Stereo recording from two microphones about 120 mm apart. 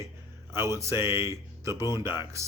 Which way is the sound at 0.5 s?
20° right (ahead or behind).